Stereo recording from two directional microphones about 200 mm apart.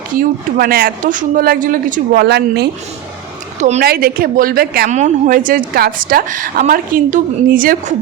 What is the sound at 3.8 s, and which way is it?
A woman's voice, 50° right (ahead or behind).